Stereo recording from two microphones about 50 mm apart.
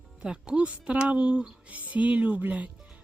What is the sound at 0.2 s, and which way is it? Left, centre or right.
Speech, centre.